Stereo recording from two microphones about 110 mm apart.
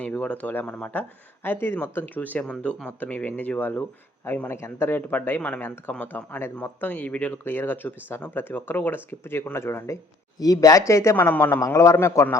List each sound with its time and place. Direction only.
0.0 s a man's voice: 10° left (ahead or behind)